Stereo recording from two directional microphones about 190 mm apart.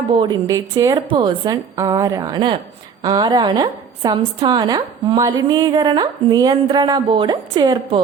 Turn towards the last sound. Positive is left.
turn(degrees=-20)  # may be behind; listen again after turning